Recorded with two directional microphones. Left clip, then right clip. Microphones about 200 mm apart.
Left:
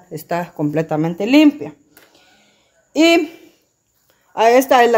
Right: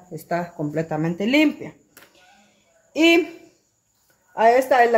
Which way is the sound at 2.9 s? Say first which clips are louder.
Left 4 dB; 40° left (ahead or behind).